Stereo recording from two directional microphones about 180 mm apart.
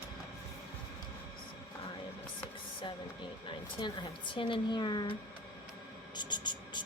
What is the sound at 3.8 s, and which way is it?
Speech, 25° left (ahead or behind).